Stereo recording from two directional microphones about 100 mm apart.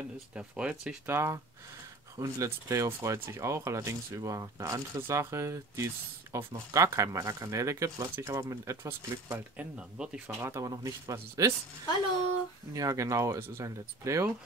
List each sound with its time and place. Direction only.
0.3 s speech: 10° right (ahead or behind)
1.0 s speech: 25° right (ahead or behind)
9.8 s speech: 10° right (ahead or behind)
10.5 s speech: 35° right (ahead or behind)
12.7 s speech: 35° right (ahead or behind)